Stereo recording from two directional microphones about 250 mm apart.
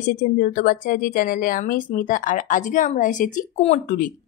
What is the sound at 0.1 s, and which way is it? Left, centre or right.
A woman's voice, left.